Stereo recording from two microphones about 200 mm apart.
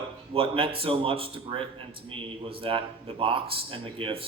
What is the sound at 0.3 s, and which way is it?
A man's voice, 30° right (ahead or behind).